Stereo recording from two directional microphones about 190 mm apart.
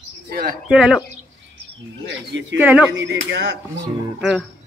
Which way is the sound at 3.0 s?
65° right (ahead or behind).